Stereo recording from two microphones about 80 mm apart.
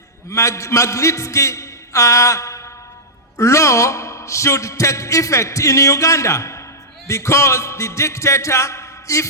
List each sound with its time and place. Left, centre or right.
0.3 s a man's voice: left